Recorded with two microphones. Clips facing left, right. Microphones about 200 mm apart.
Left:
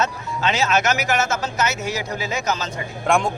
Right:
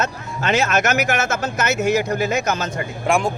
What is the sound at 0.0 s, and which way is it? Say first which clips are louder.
Speech: left 1 dB; 50° right (ahead or behind).